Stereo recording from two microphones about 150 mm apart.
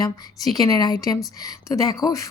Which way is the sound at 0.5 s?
25° left (ahead or behind).